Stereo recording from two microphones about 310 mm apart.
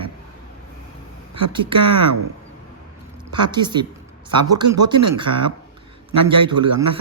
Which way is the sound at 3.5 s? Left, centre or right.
Centre.